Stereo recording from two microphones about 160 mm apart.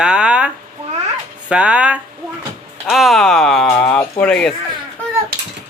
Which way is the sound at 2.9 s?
Centre (ahead or behind).